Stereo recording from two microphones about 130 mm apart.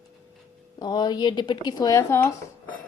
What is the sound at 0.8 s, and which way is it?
Speech, 35° left (ahead or behind).